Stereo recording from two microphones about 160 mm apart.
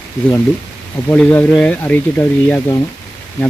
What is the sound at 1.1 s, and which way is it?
Speech, 5° left (ahead or behind).